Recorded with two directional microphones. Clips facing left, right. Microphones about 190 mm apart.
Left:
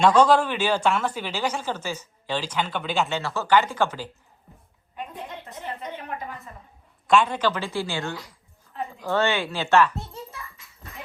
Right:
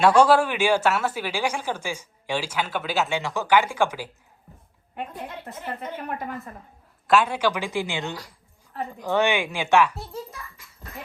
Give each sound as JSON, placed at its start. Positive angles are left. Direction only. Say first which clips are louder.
{"t": 0.0, "sound": "speech", "louder": "right 1 dB", "side_deg": -10}
{"t": 6.0, "sound": "a woman's voice", "louder": "right 3 dB", "side_deg": -60}
{"t": 7.1, "sound": "speech", "louder": "even", "side_deg": -5}